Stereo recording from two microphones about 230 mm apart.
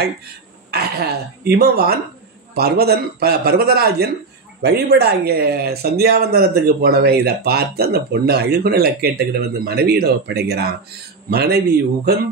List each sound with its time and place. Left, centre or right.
0.7 s speech: right